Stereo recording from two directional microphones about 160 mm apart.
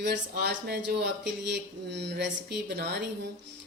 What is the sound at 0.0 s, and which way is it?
Speech, 90° right.